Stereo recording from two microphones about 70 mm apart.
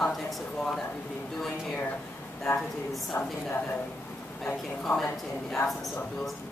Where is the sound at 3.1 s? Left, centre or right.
Left.